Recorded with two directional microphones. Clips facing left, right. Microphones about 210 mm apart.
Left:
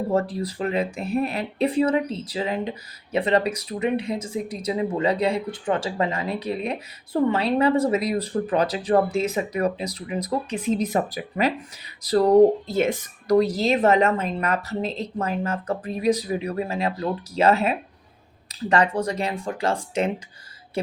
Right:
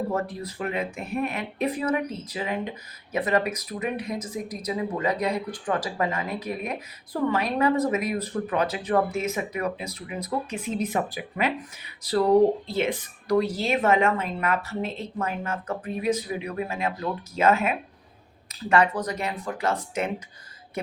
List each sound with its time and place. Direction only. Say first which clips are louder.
0.1 s speech: left 5 dB; 30° left (ahead or behind)
12.6 s speech: left 4 dB; 45° left (ahead or behind)